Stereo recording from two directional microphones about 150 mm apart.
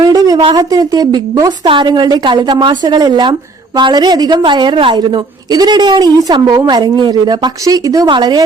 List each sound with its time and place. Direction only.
0.0 s a woman's voice: 25° right (ahead or behind)